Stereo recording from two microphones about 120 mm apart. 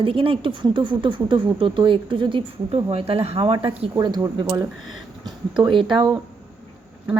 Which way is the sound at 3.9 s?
35° right (ahead or behind).